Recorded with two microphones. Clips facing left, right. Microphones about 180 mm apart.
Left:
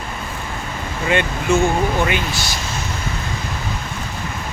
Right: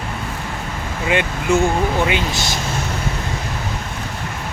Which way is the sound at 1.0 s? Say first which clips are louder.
Even; 10° right (ahead or behind).